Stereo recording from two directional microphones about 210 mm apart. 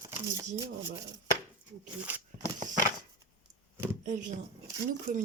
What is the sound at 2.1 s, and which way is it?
Speech, 10° right (ahead or behind).